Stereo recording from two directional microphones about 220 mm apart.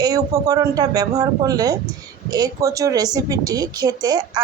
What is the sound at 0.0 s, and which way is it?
Speech, 15° right (ahead or behind).